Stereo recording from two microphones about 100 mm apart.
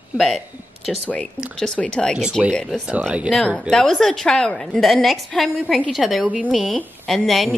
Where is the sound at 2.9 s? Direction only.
15° right (ahead or behind).